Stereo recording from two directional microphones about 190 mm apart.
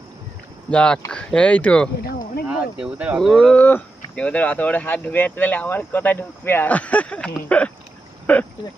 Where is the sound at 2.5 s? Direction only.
5° right (ahead or behind).